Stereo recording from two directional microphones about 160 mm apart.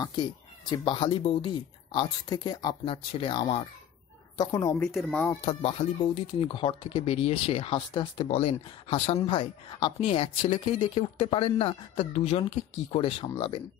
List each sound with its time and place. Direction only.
0.7 s speech: 30° left (ahead or behind)
4.4 s speech: 20° left (ahead or behind)
4.7 s speech: 5° left (ahead or behind)
5.4 s speech: 35° left (ahead or behind)